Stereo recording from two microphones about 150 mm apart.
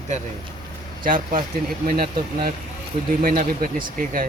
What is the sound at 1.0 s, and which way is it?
Speech, 70° right (ahead or behind).